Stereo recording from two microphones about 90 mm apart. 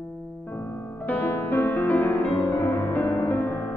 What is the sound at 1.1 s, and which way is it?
Music, 20° left (ahead or behind).